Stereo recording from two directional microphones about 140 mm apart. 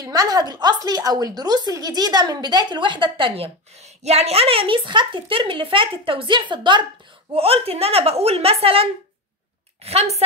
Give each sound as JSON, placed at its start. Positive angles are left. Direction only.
{"t": 0.0, "sound": "a woman's voice", "side_deg": -25}
{"t": 3.8, "sound": "a woman's voice", "side_deg": -50}
{"t": 7.3, "sound": "a woman's voice", "side_deg": -45}
{"t": 9.8, "sound": "a woman's voice", "side_deg": -50}